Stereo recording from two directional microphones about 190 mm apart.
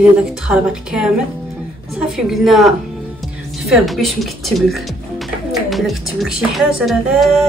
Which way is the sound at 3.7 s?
Centre (ahead or behind).